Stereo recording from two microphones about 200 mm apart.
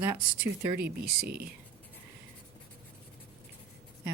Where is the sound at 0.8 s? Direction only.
50° right (ahead or behind).